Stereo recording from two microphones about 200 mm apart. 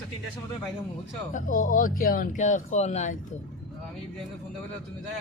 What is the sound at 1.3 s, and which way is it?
Speech, 40° left (ahead or behind).